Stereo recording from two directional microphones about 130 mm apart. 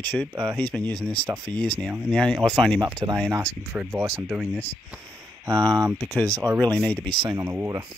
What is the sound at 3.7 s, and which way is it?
Speech, 10° right (ahead or behind).